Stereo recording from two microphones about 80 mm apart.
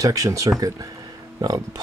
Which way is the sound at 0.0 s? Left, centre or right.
Right.